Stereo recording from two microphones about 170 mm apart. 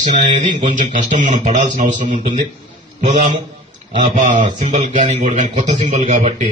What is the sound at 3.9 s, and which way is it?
A man's voice, 45° right (ahead or behind).